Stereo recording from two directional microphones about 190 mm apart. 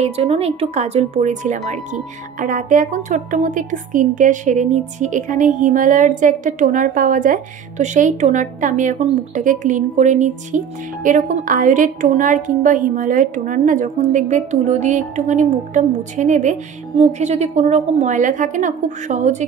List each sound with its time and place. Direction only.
0.0 s speech: 30° right (ahead or behind)